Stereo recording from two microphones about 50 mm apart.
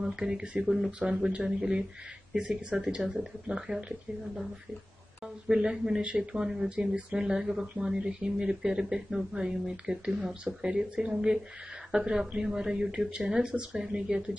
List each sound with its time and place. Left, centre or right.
0.3 s speech: centre
3.0 s speech: centre
5.2 s speech: centre